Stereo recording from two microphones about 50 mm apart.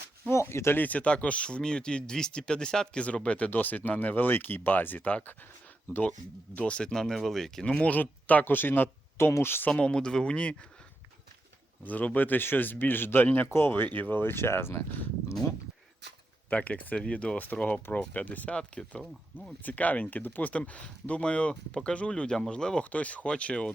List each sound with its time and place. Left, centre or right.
0.3 s speech: left
0.8 s speech: left
6.6 s speech: left; by 7.6 s centre
7.6 s speech: left
9.1 s speech: left
9.7 s speech: centre
11.9 s speech: left
16.5 s speech: left
17.3 s speech: left; by 22.8 s centre
22.8 s speech: left